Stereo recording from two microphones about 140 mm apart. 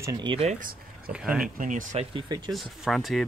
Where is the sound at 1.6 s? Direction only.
65° right (ahead or behind).